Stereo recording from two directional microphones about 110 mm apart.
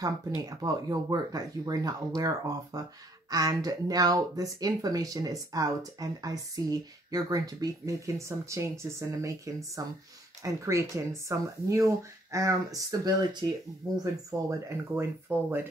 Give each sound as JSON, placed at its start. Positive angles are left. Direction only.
{"t": 0.0, "sound": "speech", "side_deg": -30}
{"t": 14.3, "sound": "speech", "side_deg": -25}